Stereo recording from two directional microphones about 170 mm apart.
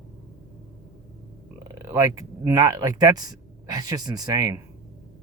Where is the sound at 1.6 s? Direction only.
15° right (ahead or behind).